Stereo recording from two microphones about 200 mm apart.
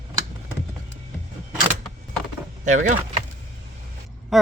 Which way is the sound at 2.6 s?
35° right (ahead or behind).